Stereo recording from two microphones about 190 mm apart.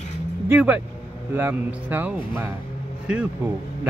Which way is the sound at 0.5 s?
10° right (ahead or behind).